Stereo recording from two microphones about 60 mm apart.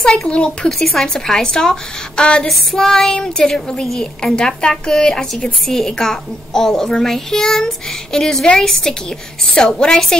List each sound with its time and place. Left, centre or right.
0.0 s speech: centre
0.7 s speech: centre